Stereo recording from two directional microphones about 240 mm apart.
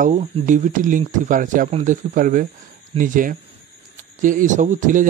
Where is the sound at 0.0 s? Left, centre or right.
Right.